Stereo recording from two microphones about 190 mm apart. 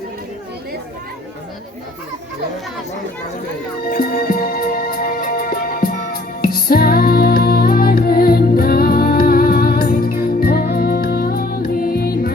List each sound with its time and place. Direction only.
3.8 s music: 50° left (ahead or behind)